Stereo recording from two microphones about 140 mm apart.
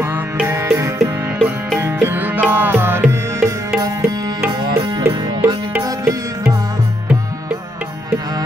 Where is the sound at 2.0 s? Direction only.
15° right (ahead or behind).